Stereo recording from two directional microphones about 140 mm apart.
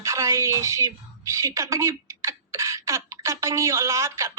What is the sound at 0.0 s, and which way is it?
A woman's voice, 20° right (ahead or behind).